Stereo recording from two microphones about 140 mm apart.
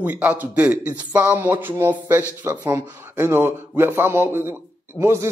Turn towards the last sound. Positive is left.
turn(degrees=-20)  # may be behind; listen again after turning